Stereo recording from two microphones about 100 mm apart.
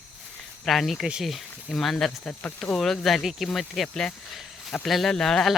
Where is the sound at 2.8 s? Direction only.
5° left (ahead or behind).